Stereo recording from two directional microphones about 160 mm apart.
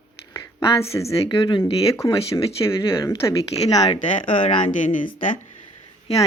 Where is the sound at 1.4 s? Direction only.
30° left (ahead or behind).